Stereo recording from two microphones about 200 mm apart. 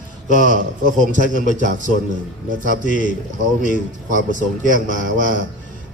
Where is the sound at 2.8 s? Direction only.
40° left (ahead or behind).